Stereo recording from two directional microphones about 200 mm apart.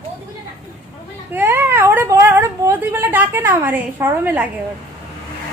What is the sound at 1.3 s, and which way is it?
Speech, 10° right (ahead or behind).